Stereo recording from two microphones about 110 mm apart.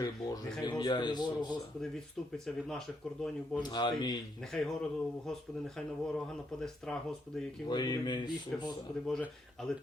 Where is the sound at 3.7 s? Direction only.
40° left (ahead or behind).